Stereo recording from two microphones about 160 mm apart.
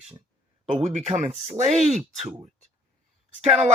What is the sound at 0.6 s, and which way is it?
Speech, 45° right (ahead or behind).